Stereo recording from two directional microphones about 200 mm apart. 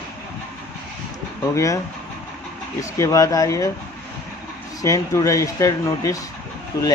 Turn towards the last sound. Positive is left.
turn(degrees=15)  # may be behind; listen again after turning